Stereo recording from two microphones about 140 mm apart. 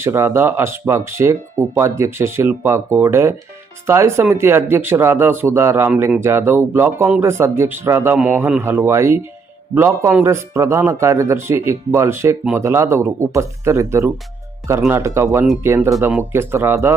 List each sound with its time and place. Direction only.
0.0 s speech: 15° right (ahead or behind)